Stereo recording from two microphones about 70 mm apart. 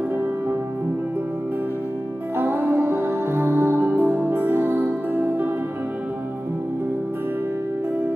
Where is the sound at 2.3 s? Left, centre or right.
Right.